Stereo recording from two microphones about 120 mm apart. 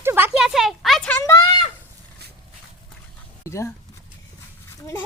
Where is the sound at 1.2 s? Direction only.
30° left (ahead or behind).